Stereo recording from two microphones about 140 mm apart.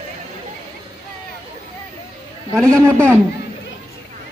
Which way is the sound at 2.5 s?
5° left (ahead or behind).